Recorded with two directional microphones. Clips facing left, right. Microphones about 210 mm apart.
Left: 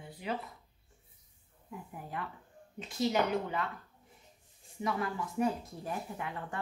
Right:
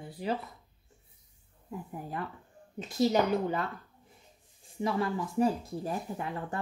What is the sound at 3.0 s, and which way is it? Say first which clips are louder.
Speech: right 4 dB; 40° right (ahead or behind).